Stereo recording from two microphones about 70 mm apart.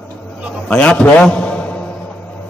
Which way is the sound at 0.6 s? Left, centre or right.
Centre.